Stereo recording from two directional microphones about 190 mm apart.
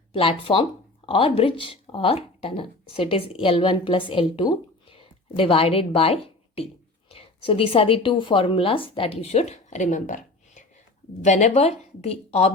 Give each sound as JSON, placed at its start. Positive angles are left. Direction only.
{"t": 0.1, "sound": "a woman's voice", "side_deg": 30}